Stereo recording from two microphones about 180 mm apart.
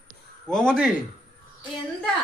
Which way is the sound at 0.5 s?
5° left (ahead or behind).